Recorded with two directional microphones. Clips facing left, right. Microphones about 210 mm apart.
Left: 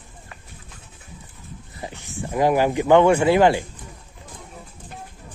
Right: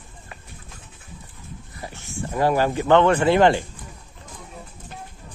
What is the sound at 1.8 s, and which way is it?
Speech, 15° left (ahead or behind).